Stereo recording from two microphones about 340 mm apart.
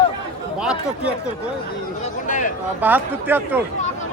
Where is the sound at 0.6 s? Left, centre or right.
Centre.